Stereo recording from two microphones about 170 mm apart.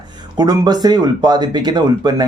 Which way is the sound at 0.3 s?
25° right (ahead or behind).